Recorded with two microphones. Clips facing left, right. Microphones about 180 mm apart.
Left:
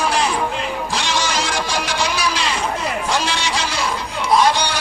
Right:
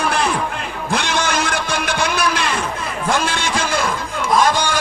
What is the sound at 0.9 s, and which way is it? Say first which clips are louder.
Music: right 6 dB; 55° right (ahead or behind).